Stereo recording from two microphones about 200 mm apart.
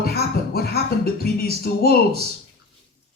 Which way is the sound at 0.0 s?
50° left (ahead or behind).